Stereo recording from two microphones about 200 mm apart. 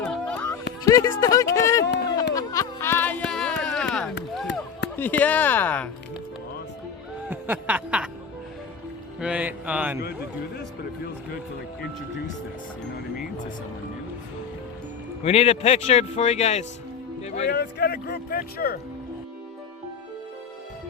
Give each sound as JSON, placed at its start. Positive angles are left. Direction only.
{"t": 0.0, "sound": "a sound", "side_deg": 5}
{"t": 0.9, "sound": "speech", "side_deg": 15}
{"t": 2.3, "sound": "a sound", "side_deg": 15}
{"t": 4.9, "sound": "speech", "side_deg": 10}
{"t": 7.3, "sound": "snicker", "side_deg": -10}
{"t": 9.2, "sound": "speech", "side_deg": -5}
{"t": 15.2, "sound": "speech", "side_deg": 30}
{"t": 17.5, "sound": "speech", "side_deg": 55}